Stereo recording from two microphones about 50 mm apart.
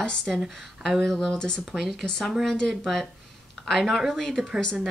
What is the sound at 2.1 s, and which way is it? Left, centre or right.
Speech, centre.